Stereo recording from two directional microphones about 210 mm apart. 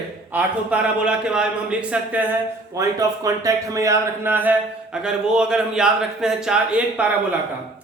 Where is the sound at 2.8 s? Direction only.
15° right (ahead or behind).